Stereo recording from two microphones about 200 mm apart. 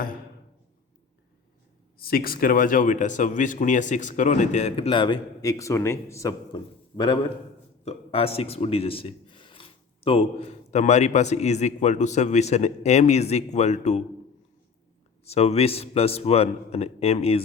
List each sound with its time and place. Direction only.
2.0 s speech: 45° left (ahead or behind)
15.2 s speech: 30° left (ahead or behind)